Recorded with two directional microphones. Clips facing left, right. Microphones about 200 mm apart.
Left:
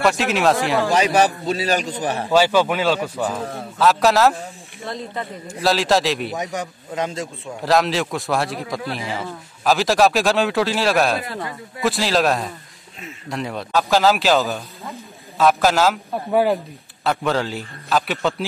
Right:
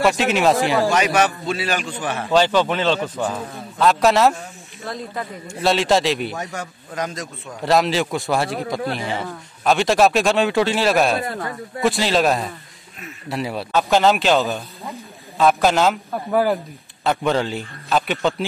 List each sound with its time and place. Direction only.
0.0 s speech: centre (ahead or behind)
0.8 s a man's voice: 35° left (ahead or behind)
2.3 s speech: 10° left (ahead or behind)
6.3 s a man's voice: 15° left (ahead or behind)
7.6 s speech: centre (ahead or behind)